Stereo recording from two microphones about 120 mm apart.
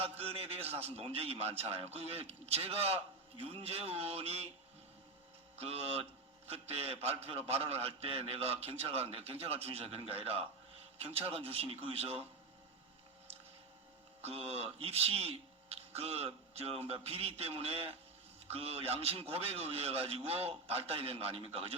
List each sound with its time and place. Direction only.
0.2 s a man's voice: 55° right (ahead or behind)
5.5 s a man's voice: 55° right (ahead or behind)
14.3 s a man's voice: 55° right (ahead or behind)